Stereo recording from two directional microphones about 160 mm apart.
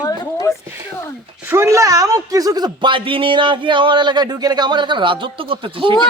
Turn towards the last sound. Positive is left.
turn(degrees=-30)  # may be behind; listen again after turning